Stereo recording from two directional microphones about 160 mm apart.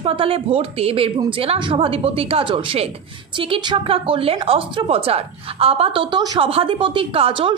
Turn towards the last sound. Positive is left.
turn(degrees=-35)  # may be behind; listen again after turning